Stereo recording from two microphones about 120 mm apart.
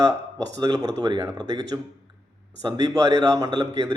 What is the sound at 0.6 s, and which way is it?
Speech, 30° right (ahead or behind).